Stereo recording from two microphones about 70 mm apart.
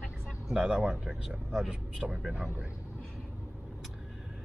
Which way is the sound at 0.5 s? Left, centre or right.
Centre.